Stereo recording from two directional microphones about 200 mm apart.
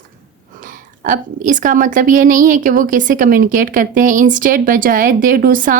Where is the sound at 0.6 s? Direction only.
40° right (ahead or behind).